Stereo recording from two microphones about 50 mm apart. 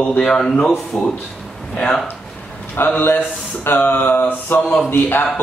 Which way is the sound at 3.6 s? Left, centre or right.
Left.